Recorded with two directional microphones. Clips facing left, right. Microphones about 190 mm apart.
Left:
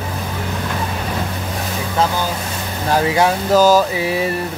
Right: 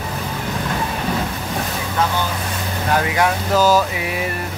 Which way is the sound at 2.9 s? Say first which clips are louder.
Left 3 dB; 30° left (ahead or behind).